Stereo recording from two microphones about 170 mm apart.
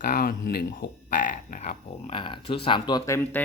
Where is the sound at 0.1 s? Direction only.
60° left (ahead or behind).